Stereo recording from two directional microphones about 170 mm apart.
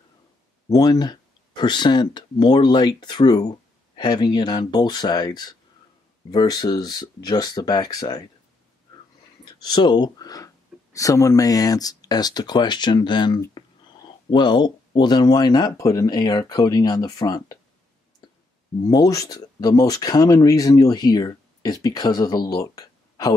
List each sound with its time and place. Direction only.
0.7 s speech: 20° left (ahead or behind)
9.4 s speech: 25° left (ahead or behind)
18.9 s speech: 20° left (ahead or behind)